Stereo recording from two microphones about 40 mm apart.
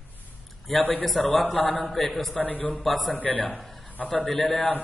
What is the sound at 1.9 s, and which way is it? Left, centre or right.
Speech, centre.